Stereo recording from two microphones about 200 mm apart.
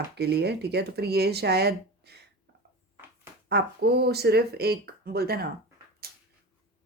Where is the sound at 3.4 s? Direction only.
55° right (ahead or behind).